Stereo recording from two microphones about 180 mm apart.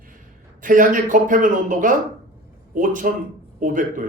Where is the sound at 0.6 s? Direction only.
45° right (ahead or behind).